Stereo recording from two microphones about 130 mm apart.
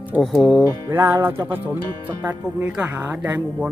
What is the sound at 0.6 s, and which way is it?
Speech, 15° right (ahead or behind).